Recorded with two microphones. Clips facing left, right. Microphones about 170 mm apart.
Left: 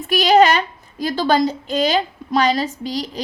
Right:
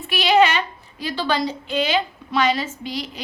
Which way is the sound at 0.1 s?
40° left (ahead or behind).